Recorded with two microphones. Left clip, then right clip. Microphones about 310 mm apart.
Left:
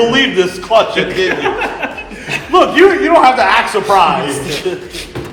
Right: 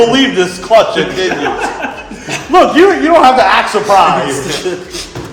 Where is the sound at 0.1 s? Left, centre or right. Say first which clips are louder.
Right 1 dB; right.